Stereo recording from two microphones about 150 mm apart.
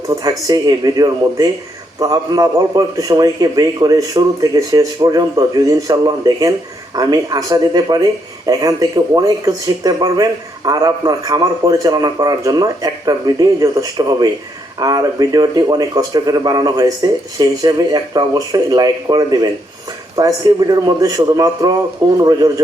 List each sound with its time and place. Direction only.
0.1 s speech: 25° right (ahead or behind)